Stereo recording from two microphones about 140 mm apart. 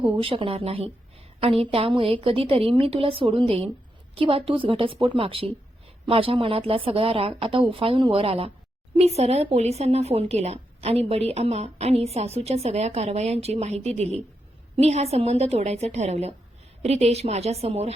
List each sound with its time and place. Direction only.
0.2 s a woman's voice: 40° right (ahead or behind)